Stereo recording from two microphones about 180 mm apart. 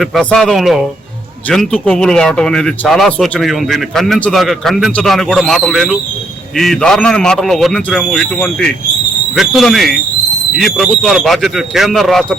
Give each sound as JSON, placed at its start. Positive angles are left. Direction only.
{"t": 0.0, "sound": "a man's voice", "side_deg": 0}